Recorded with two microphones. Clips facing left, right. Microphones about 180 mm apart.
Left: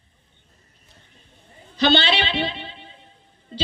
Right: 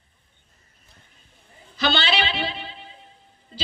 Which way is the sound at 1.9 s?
30° left (ahead or behind).